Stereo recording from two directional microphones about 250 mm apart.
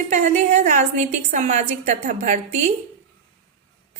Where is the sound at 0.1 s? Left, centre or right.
Right.